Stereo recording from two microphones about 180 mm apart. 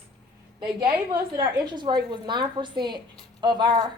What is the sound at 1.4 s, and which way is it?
A woman's voice, 25° right (ahead or behind).